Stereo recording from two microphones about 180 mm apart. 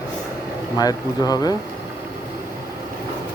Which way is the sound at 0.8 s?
20° left (ahead or behind).